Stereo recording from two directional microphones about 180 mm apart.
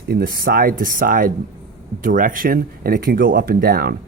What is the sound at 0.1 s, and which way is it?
Speech, 55° right (ahead or behind).